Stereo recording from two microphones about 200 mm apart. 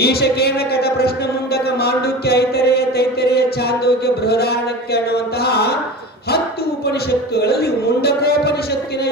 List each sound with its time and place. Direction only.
0.0 s speech: 50° left (ahead or behind)
1.5 s chant: 55° left (ahead or behind)
7.3 s a sound: 55° left (ahead or behind)